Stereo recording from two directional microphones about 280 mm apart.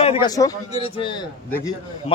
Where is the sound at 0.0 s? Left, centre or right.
Centre.